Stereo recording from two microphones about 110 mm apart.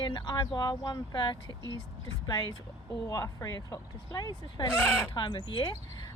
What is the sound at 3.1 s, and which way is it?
Speech, 30° left (ahead or behind).